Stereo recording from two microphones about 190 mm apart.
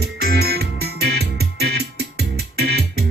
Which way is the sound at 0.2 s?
55° right (ahead or behind).